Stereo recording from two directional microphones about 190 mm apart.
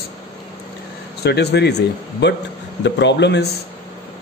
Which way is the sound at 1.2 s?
60° left (ahead or behind).